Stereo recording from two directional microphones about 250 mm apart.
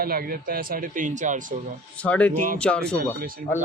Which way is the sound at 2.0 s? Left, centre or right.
Centre.